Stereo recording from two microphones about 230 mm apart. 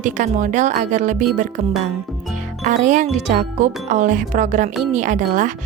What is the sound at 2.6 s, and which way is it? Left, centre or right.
Speech, right.